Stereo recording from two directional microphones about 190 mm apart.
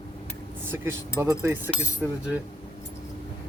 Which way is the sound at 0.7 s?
15° right (ahead or behind).